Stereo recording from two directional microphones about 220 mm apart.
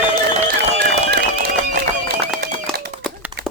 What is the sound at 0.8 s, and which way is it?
Run, 45° right (ahead or behind).